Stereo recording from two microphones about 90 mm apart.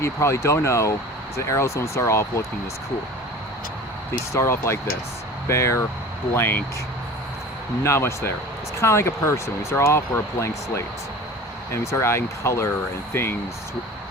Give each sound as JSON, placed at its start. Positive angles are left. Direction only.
{"t": 0.0, "sound": "speech", "side_deg": 30}
{"t": 4.3, "sound": "speech", "side_deg": 30}
{"t": 7.9, "sound": "speech", "side_deg": 30}